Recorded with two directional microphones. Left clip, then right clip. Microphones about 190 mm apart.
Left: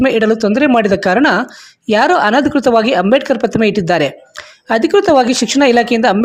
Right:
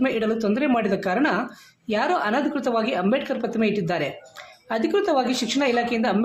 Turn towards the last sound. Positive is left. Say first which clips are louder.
# left 12 dB
turn(degrees=45)  # may be behind; listen again after turning